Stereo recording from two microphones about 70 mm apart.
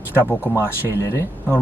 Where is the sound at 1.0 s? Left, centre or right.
Left.